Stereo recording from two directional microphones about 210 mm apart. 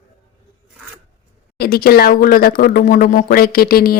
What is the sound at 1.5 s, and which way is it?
Speech, 45° left (ahead or behind).